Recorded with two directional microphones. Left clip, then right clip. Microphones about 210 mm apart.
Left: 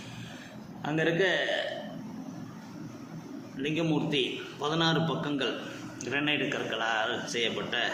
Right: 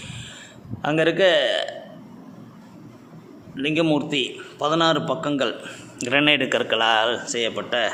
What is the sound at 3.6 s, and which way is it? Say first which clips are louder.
A man's voice: right 9 dB; 50° right (ahead or behind).